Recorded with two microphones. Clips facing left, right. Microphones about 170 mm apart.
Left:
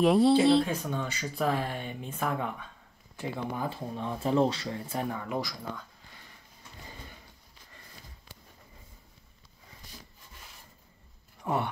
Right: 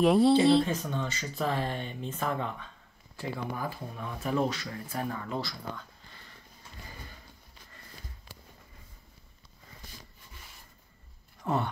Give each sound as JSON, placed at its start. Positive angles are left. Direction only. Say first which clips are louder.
{"t": 0.0, "sound": "speech", "louder": "even", "side_deg": 0}
{"t": 3.2, "sound": "speech", "louder": "left 1 dB", "side_deg": 20}
{"t": 5.1, "sound": "speech", "louder": "left 2 dB", "side_deg": 15}
{"t": 11.4, "sound": "speech", "louder": "even", "side_deg": 10}